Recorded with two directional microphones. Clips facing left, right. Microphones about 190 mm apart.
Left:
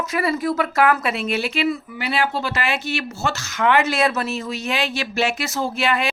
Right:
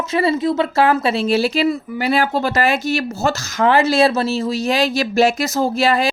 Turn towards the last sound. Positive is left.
turn(degrees=-35)  # may be behind; listen again after turning